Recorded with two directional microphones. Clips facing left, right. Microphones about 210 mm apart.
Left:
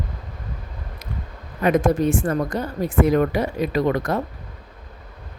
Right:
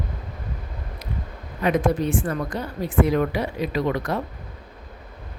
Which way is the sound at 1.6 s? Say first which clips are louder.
Left 3 dB; 45° left (ahead or behind).